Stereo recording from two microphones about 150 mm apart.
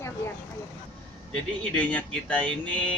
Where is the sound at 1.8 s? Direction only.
10° left (ahead or behind).